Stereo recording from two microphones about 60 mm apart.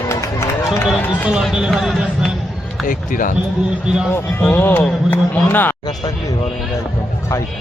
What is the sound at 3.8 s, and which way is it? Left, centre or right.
Speech, centre.